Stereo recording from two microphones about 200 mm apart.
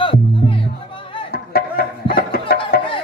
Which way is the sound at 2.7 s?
50° left (ahead or behind).